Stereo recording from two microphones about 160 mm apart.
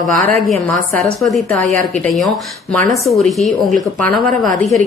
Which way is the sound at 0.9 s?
Centre (ahead or behind).